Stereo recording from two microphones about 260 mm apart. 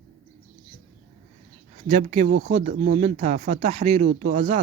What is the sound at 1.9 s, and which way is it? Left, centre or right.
Speech, right.